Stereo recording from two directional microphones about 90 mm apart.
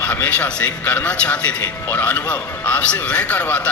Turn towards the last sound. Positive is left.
turn(degrees=20)  # may be behind; listen again after turning